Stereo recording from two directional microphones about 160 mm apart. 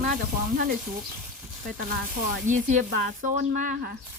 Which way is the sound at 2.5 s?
55° right (ahead or behind).